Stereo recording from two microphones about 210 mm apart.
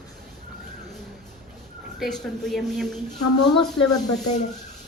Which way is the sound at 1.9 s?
Centre (ahead or behind).